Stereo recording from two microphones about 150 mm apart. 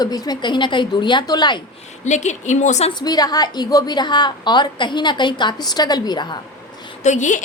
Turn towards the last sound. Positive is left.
turn(degrees=55)  # may be behind; listen again after turning